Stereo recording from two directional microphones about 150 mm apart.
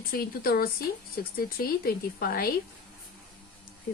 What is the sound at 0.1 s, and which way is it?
A woman's voice, 75° left (ahead or behind).